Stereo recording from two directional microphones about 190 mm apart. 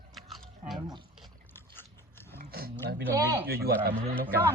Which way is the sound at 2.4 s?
55° right (ahead or behind).